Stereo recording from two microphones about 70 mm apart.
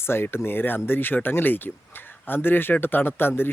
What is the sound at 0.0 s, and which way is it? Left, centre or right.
Speech, left.